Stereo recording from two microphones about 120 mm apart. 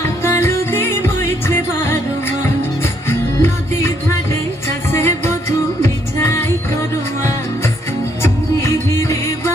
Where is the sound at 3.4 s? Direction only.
20° left (ahead or behind).